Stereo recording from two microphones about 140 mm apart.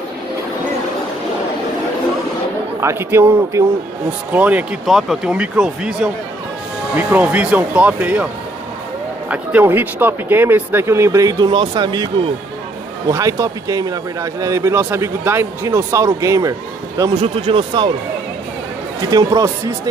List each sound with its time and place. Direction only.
2.8 s speech: 20° right (ahead or behind)
9.3 s speech: 10° right (ahead or behind); by 12.1 s 30° right (ahead or behind)
13.1 s speech: 25° right (ahead or behind)
17.2 s speech: 40° right (ahead or behind)
19.0 s speech: 25° right (ahead or behind)